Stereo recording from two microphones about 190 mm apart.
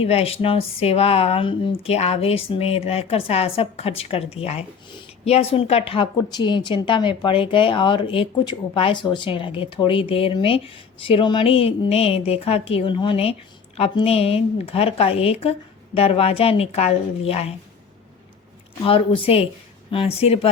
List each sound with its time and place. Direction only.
0.0 s a woman's voice: 30° left (ahead or behind)
18.9 s a woman's voice: 30° left (ahead or behind)